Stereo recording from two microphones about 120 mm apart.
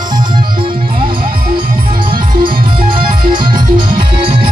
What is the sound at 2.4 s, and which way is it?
Music, 45° right (ahead or behind).